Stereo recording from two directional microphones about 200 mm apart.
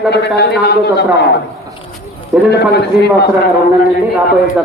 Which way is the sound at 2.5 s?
55° left (ahead or behind).